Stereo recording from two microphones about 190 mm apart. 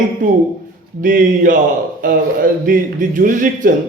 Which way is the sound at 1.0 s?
45° right (ahead or behind).